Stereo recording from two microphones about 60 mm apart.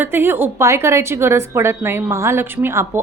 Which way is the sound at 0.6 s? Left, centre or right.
Right.